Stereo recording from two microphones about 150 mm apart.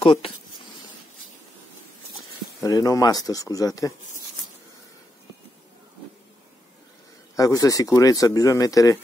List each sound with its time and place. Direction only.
0.0 s speech: 35° left (ahead or behind)
2.6 s speech: 25° left (ahead or behind)
7.3 s speech: 20° left (ahead or behind)